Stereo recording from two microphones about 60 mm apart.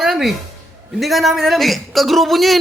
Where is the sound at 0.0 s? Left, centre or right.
Centre.